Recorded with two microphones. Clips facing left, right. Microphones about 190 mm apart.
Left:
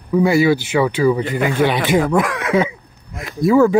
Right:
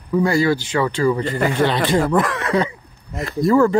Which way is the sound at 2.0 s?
Centre (ahead or behind).